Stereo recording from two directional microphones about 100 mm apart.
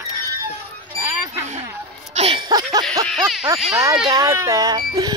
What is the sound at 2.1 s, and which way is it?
Music, 90° right.